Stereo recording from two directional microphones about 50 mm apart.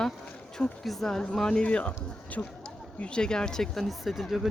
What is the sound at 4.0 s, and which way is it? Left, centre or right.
Speech, centre.